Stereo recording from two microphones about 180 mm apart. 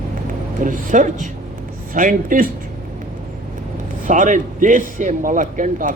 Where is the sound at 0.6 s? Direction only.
45° right (ahead or behind).